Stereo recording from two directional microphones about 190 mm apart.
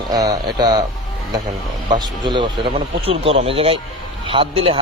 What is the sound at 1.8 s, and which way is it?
A man's voice, 20° right (ahead or behind).